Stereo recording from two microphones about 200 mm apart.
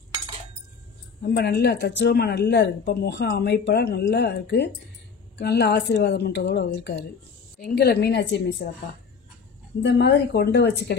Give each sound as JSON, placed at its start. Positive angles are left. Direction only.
{"t": 1.2, "sound": "speech", "side_deg": 55}
{"t": 9.8, "sound": "speech", "side_deg": 55}